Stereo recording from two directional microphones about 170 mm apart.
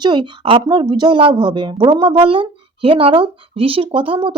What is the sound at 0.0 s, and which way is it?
Speech, 25° right (ahead or behind).